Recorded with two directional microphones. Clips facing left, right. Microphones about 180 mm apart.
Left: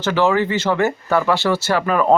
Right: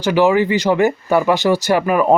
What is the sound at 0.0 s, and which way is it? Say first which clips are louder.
Speech: right 3 dB; 15° right (ahead or behind).